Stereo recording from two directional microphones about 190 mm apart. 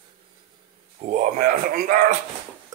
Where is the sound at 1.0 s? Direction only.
35° right (ahead or behind).